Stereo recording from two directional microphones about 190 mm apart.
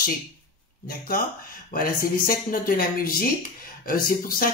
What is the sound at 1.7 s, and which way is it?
Speech, 45° left (ahead or behind).